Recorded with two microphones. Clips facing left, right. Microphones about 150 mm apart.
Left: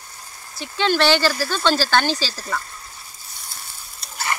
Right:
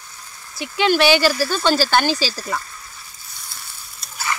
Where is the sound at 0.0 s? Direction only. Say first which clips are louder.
Even; 35° left (ahead or behind).